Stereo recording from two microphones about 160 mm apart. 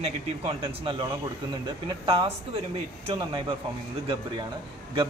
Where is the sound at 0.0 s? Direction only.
35° right (ahead or behind).